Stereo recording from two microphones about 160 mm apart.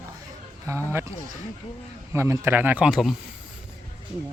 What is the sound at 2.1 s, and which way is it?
Speech, 15° right (ahead or behind).